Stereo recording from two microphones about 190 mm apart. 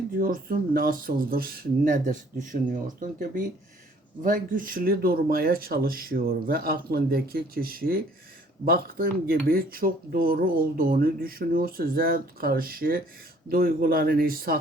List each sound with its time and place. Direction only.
0.2 s speech: 50° right (ahead or behind)